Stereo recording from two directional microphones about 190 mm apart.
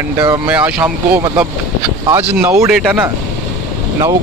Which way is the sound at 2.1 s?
10° right (ahead or behind).